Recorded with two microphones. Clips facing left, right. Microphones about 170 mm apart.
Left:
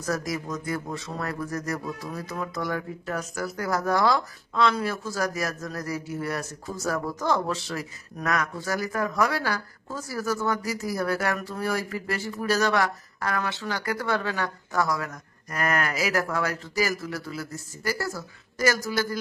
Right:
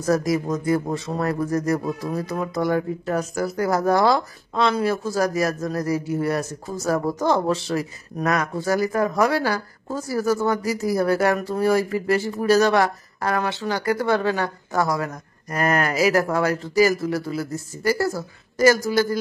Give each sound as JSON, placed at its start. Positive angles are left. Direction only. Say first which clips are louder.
{"t": 0.0, "sound": "speech", "louder": "right 8 dB", "side_deg": -30}